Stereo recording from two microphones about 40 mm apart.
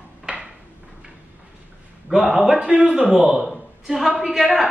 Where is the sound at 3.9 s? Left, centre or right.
Centre.